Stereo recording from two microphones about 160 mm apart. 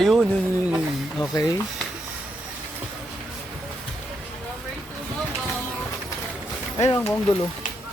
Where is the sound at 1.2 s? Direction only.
20° left (ahead or behind).